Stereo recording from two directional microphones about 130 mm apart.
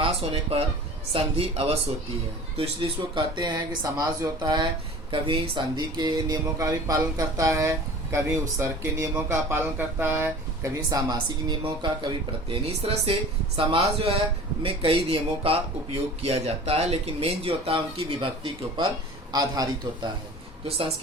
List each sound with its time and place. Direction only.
0.0 s speech: 45° right (ahead or behind); by 4.6 s 30° right (ahead or behind)
5.1 s speech: 40° right (ahead or behind); by 10.7 s 15° right (ahead or behind)
10.8 s speech: 30° right (ahead or behind)
12.6 s speech: 50° right (ahead or behind); by 20.1 s 30° right (ahead or behind)
20.7 s speech: 50° right (ahead or behind)